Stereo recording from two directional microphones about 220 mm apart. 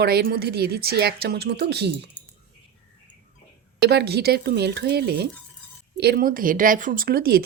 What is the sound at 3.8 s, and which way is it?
Speech, 50° right (ahead or behind).